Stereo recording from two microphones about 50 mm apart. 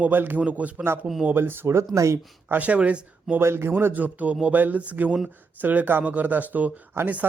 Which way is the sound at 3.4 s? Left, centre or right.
Right.